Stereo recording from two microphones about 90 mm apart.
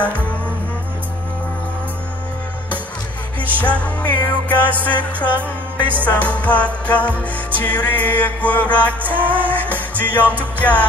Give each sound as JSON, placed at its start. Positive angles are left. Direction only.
{"t": 3.6, "sound": "music", "side_deg": 15}
{"t": 9.1, "sound": "music", "side_deg": -20}
{"t": 9.5, "sound": "music", "side_deg": 20}